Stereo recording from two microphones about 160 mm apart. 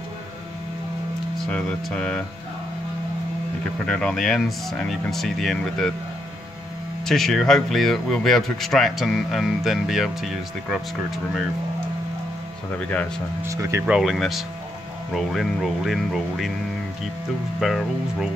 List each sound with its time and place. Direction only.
1.4 s speech: 5° left (ahead or behind)
3.8 s speech: 5° left (ahead or behind)
7.1 s speech: centre (ahead or behind)
13.4 s speech: 20° right (ahead or behind)
13.8 s speech: 5° right (ahead or behind)
17.6 s speech: centre (ahead or behind)